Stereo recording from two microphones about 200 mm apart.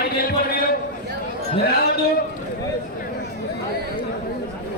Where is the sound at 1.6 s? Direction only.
50° left (ahead or behind).